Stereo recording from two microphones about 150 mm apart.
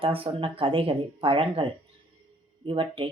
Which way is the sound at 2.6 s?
35° right (ahead or behind).